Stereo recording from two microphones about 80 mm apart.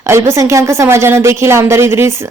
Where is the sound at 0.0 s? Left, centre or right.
Right.